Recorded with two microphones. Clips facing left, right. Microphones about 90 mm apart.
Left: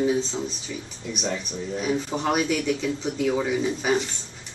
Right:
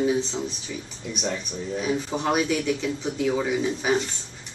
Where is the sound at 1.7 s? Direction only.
10° right (ahead or behind).